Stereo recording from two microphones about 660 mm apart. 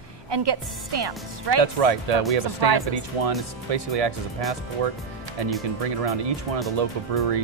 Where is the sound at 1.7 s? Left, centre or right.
Right.